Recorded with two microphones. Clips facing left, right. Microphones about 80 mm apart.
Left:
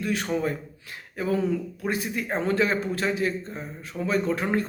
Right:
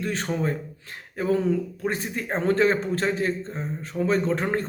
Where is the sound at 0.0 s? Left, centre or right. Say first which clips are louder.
Even; right.